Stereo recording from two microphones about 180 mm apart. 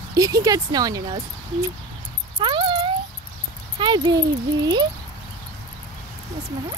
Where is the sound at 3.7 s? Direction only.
25° right (ahead or behind).